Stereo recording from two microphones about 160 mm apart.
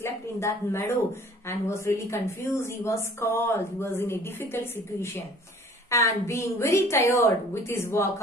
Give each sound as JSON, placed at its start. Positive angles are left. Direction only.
{"t": 0.0, "sound": "a woman's voice", "side_deg": 15}